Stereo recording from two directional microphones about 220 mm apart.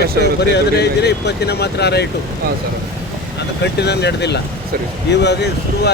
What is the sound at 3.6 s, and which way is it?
Speech, 50° left (ahead or behind).